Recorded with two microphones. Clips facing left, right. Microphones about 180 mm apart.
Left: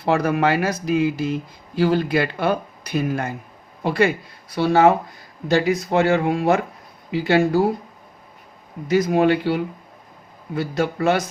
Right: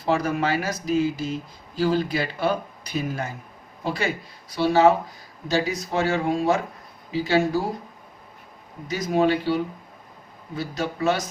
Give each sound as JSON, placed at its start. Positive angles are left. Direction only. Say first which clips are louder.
{"t": 0.0, "sound": "speech", "louder": "left 4 dB", "side_deg": 65}
{"t": 8.9, "sound": "speech", "louder": "left 4 dB", "side_deg": 60}